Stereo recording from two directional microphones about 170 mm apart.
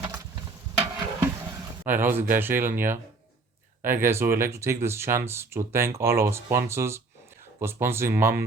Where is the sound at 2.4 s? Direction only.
10° right (ahead or behind).